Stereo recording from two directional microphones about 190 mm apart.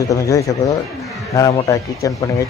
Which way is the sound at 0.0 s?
15° left (ahead or behind).